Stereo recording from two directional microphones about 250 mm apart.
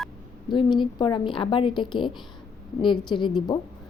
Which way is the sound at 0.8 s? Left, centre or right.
Centre.